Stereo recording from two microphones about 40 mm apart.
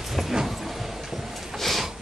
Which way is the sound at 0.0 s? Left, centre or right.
Centre.